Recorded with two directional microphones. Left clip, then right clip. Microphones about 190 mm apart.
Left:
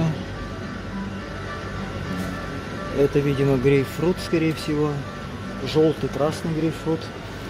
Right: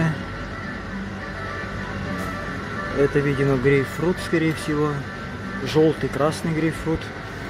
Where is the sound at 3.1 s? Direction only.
10° left (ahead or behind).